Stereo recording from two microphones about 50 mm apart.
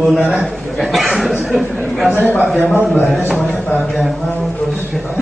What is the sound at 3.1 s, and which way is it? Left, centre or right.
Speech, centre.